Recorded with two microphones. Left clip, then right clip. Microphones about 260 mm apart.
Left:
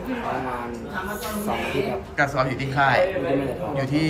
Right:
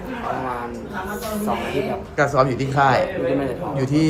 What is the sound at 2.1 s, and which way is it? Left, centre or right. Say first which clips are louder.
Speech: right 5 dB; right.